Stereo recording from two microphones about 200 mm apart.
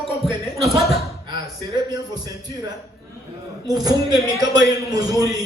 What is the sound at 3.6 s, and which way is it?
A man's voice, 20° right (ahead or behind).